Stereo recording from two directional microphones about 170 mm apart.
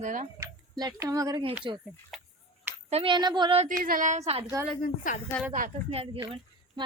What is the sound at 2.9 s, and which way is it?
Speech, 30° right (ahead or behind).